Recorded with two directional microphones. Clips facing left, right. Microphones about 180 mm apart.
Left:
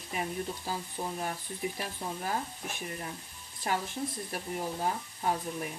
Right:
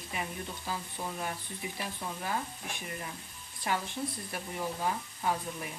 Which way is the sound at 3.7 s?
40° left (ahead or behind).